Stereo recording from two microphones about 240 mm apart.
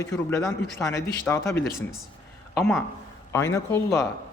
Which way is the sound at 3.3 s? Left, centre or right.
Centre.